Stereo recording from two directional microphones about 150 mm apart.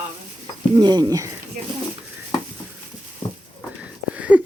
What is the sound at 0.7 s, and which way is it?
Speech, 30° right (ahead or behind).